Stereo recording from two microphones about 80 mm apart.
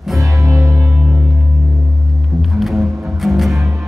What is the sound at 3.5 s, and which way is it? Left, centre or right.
Music, right.